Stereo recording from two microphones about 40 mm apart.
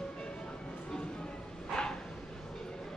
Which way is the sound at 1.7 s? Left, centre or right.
Left.